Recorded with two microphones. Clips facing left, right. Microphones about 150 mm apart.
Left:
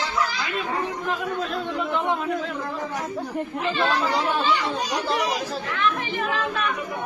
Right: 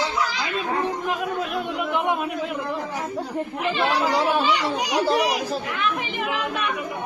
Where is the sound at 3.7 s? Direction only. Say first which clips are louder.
Right 2 dB; 15° right (ahead or behind).